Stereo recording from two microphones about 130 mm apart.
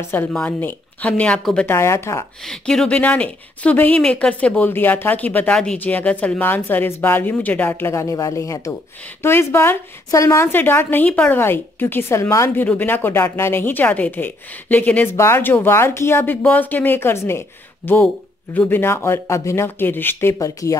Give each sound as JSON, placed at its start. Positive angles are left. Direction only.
{"t": 0.3, "sound": "speech", "side_deg": 10}
{"t": 1.7, "sound": "speech", "side_deg": 20}
{"t": 2.4, "sound": "speech", "side_deg": 5}